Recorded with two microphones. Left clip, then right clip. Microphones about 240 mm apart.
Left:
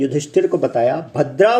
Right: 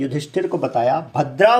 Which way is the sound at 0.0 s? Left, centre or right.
Centre.